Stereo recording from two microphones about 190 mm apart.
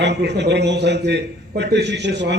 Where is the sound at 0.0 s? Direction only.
65° right (ahead or behind).